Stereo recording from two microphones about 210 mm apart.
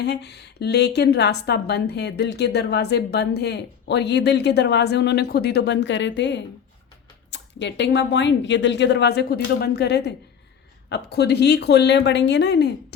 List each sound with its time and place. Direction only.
0.0 s a woman's voice: 55° left (ahead or behind)